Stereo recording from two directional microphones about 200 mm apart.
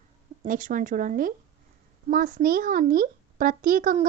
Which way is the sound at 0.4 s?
40° right (ahead or behind).